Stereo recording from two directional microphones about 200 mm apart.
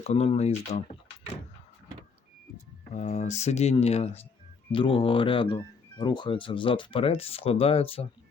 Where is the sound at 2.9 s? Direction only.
35° left (ahead or behind).